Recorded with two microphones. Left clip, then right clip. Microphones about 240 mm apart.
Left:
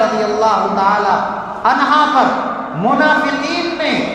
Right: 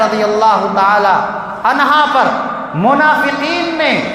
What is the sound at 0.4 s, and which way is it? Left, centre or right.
Speech, right.